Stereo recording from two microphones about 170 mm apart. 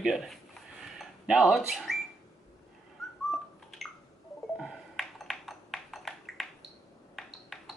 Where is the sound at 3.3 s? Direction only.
Centre (ahead or behind).